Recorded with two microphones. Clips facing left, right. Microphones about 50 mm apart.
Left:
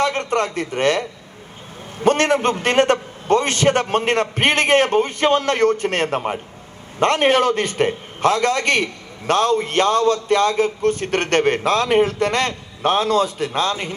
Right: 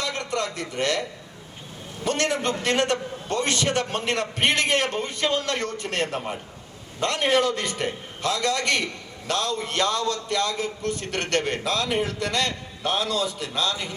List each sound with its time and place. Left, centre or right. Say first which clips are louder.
0.0 s a man's voice: left 8 dB; left